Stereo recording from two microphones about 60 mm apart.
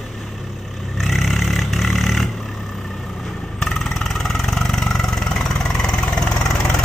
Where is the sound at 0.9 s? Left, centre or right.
Centre.